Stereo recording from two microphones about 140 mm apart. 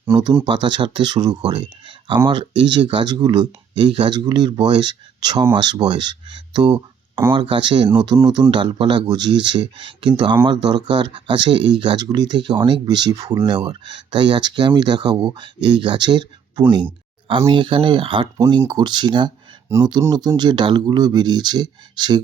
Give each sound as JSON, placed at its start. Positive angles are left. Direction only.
{"t": 0.1, "sound": "speech", "side_deg": -35}
{"t": 6.7, "sound": "speech", "side_deg": -15}
{"t": 7.3, "sound": "speech", "side_deg": -35}